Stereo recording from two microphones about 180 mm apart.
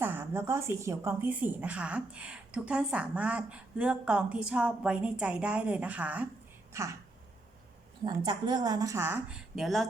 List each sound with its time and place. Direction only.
0.0 s speech: 10° right (ahead or behind)
8.0 s speech: 25° right (ahead or behind); by 9.8 s centre (ahead or behind)